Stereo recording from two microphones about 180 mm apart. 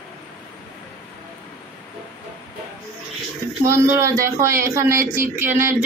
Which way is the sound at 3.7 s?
15° right (ahead or behind).